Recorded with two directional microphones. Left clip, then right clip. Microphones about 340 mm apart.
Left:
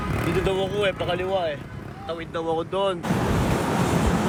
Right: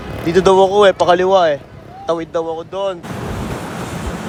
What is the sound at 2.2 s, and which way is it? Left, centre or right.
Waves, centre.